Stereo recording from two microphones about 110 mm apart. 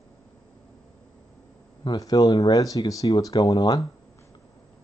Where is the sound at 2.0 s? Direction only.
35° left (ahead or behind).